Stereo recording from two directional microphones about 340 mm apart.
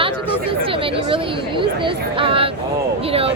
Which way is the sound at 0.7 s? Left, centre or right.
Centre.